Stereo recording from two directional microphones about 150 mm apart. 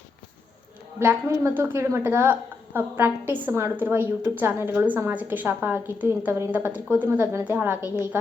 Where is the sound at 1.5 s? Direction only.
15° right (ahead or behind).